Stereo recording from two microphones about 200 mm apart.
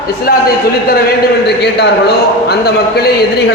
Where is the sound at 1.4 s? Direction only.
55° left (ahead or behind).